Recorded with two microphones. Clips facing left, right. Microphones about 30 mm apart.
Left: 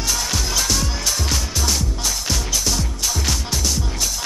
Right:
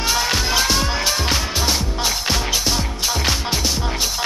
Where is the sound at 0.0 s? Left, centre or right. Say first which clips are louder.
Right 4 dB; right.